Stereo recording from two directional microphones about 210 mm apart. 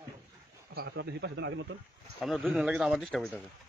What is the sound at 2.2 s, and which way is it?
A man's voice, centre (ahead or behind).